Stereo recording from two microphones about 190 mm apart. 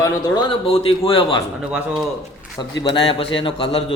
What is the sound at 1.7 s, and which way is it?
Speech, 5° right (ahead or behind).